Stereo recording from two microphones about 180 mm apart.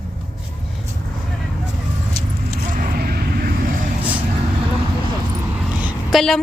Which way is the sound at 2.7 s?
50° right (ahead or behind).